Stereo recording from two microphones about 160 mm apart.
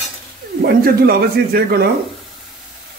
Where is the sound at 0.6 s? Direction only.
75° right (ahead or behind).